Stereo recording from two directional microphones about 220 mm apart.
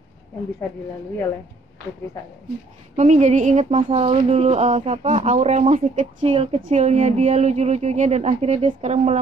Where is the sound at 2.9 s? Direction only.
30° right (ahead or behind).